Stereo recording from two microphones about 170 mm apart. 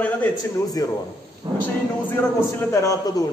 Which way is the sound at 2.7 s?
20° left (ahead or behind).